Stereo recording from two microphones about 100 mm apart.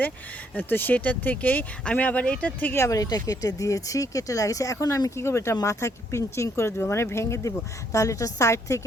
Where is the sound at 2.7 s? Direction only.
30° left (ahead or behind).